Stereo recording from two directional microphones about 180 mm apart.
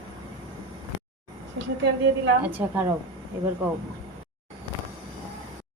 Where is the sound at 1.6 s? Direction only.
90° right.